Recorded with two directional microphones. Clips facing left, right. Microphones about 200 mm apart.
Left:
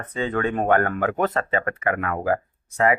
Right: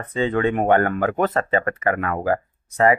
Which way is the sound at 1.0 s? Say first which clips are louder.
Right 2 dB; 35° right (ahead or behind).